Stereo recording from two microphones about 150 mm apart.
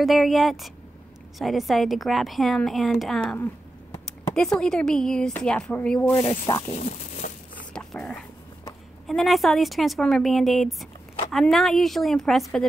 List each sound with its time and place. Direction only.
0.0 s a woman's voice: centre (ahead or behind)
4.4 s a woman's voice: 5° left (ahead or behind)
6.7 s speech: 50° left (ahead or behind)
7.5 s a sound: 5° left (ahead or behind)
9.0 s a woman's voice: centre (ahead or behind)